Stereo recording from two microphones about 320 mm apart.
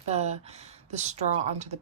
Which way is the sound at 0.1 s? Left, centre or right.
Centre.